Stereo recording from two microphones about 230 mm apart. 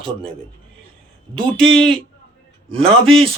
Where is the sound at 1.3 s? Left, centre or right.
Right.